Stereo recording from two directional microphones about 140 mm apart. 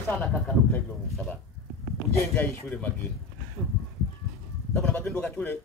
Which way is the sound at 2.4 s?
10° left (ahead or behind).